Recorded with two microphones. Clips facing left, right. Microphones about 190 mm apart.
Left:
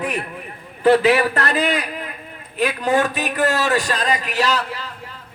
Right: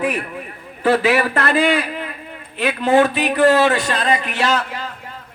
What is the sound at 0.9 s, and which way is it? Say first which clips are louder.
Speech: left 2 dB; 35° left (ahead or behind).